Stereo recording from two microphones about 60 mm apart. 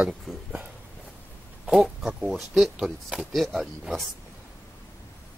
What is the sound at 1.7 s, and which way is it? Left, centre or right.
Speech, centre.